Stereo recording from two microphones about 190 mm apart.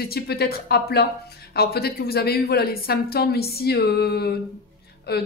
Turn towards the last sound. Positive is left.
turn(degrees=60)  # may be behind; listen again after turning